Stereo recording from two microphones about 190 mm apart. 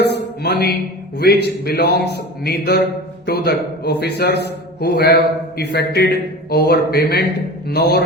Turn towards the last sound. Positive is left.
turn(degrees=60)  # may be behind; listen again after turning